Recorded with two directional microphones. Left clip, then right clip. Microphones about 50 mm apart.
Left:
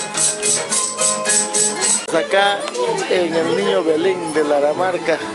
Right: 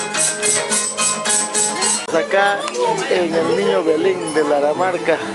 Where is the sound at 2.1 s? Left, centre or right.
Left.